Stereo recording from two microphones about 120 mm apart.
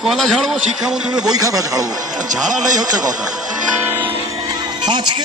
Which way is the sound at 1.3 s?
30° right (ahead or behind).